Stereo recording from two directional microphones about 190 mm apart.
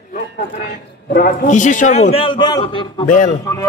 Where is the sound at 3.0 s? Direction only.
40° left (ahead or behind).